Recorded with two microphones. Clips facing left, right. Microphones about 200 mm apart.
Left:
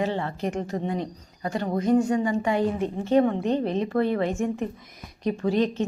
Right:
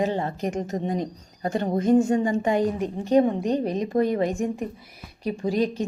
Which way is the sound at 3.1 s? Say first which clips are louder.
Right 1 dB; 15° right (ahead or behind).